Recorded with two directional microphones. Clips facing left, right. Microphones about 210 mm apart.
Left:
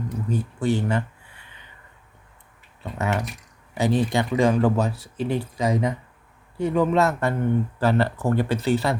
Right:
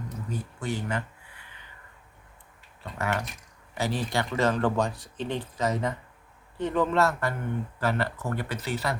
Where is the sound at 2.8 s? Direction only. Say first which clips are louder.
Left 4 dB; 20° left (ahead or behind).